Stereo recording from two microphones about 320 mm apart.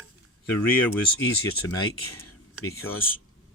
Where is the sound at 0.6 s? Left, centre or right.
Centre.